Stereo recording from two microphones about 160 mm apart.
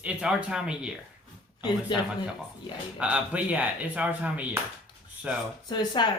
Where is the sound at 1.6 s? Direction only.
25° left (ahead or behind).